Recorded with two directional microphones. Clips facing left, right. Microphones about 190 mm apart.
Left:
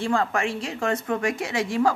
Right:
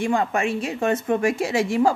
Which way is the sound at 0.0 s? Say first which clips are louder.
Right 2 dB; 20° right (ahead or behind).